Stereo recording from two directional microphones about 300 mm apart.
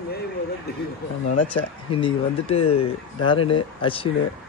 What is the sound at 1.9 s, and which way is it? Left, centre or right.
A man's voice, centre.